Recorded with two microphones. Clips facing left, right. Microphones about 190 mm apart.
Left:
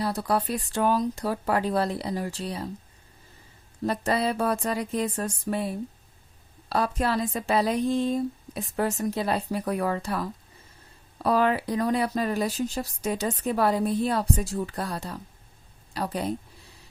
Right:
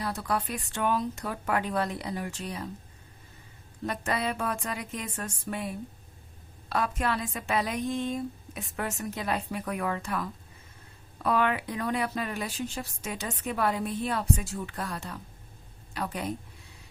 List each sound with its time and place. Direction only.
0.0 s speech: 35° left (ahead or behind)
3.8 s a woman's voice: 35° left (ahead or behind)